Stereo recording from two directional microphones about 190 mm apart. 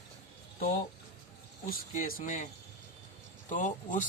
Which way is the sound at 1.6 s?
50° left (ahead or behind).